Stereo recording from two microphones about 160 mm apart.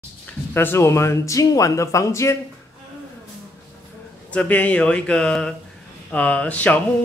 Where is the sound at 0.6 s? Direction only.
15° left (ahead or behind).